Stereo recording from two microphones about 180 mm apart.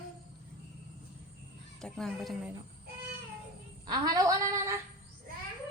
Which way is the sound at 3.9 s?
20° right (ahead or behind).